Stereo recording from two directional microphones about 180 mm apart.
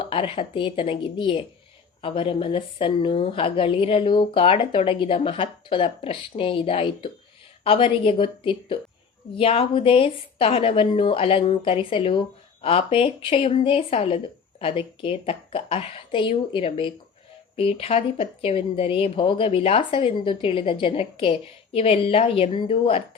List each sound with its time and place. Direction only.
0.0 s speech: 30° left (ahead or behind)